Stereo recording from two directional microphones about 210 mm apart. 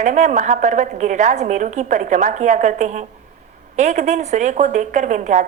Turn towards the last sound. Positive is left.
turn(degrees=-35)  # may be behind; listen again after turning